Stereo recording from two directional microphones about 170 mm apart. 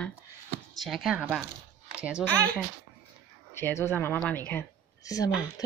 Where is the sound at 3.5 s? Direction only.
15° left (ahead or behind).